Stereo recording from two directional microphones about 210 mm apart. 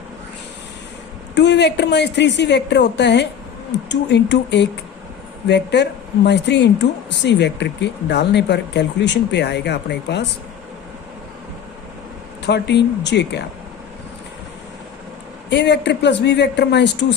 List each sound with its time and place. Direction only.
1.4 s a woman's voice: 55° left (ahead or behind)
12.5 s speech: 55° left (ahead or behind)
15.4 s a woman's voice: 55° left (ahead or behind)